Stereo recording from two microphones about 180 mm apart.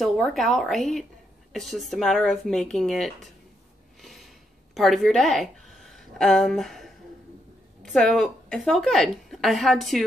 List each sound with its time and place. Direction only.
0.0 s a woman's voice: centre (ahead or behind)
4.0 s a sound: centre (ahead or behind)
4.7 s a woman's voice: centre (ahead or behind)